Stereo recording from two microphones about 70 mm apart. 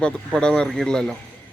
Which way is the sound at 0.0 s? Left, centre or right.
Centre.